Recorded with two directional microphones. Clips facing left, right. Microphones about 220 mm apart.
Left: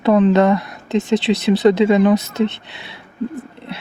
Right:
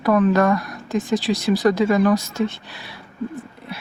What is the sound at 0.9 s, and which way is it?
Speech, 70° left (ahead or behind).